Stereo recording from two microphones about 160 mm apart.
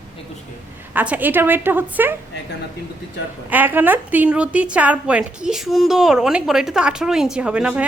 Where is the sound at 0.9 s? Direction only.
10° right (ahead or behind).